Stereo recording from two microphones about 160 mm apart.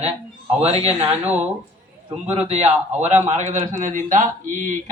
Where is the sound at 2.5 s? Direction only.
40° right (ahead or behind).